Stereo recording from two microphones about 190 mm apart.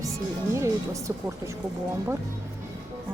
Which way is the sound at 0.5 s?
15° right (ahead or behind).